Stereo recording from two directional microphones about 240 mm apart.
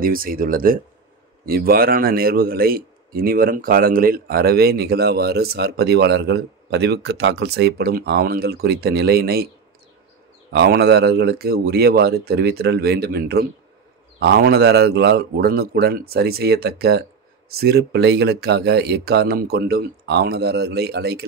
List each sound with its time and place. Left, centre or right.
0.0 s speech: right
10.5 s speech: right